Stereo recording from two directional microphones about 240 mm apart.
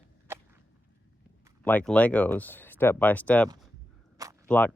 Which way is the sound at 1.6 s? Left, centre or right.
Centre.